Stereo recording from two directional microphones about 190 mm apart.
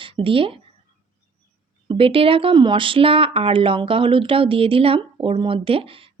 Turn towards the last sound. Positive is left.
turn(degrees=-30)  # may be behind; listen again after turning